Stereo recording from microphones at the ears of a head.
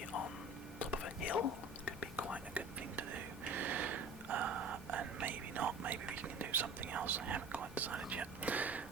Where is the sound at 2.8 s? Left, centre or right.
Right.